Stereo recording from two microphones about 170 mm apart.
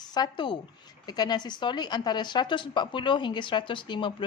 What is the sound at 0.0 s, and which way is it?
A woman's voice, 25° left (ahead or behind).